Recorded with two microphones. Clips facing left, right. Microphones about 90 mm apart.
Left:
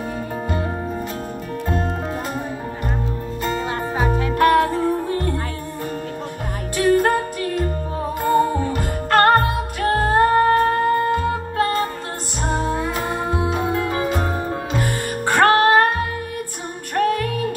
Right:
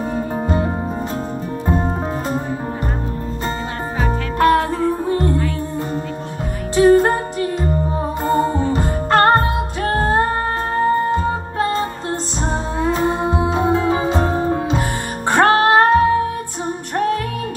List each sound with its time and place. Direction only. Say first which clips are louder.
0.1 s music: right 5 dB; 30° right (ahead or behind)
1.7 s music: right 4 dB; 20° right (ahead or behind)
4.4 s music: right 1 dB; 25° right (ahead or behind)
6.7 s music: right 5 dB; 25° right (ahead or behind)
16.9 s music: even; 20° right (ahead or behind)